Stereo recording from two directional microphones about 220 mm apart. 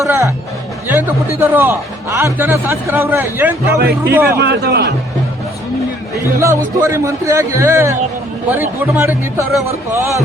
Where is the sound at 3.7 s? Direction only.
50° right (ahead or behind).